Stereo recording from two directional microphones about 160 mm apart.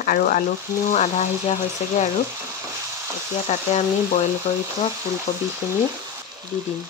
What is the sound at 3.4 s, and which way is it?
Speech, 45° left (ahead or behind).